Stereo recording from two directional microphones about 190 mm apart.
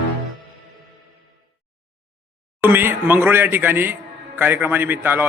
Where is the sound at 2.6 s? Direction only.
10° right (ahead or behind).